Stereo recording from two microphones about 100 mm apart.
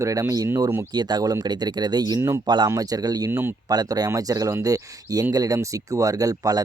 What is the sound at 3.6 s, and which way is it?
Speech, 40° right (ahead or behind).